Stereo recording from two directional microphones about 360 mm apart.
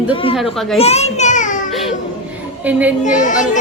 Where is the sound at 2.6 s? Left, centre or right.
Centre.